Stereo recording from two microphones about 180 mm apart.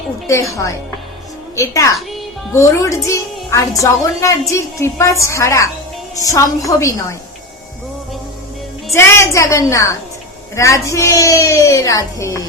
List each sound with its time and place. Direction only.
1.5 s a woman's voice: 15° left (ahead or behind)
8.9 s a woman's voice: 15° left (ahead or behind)